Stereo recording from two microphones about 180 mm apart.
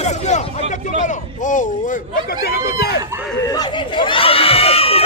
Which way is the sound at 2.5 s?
60° left (ahead or behind).